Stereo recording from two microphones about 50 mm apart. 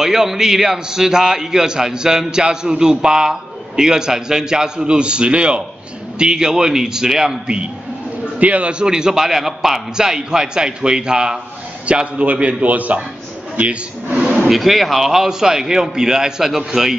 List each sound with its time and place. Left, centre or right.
0.0 s a man's voice: centre
8.4 s a man's voice: right
14.5 s a man's voice: centre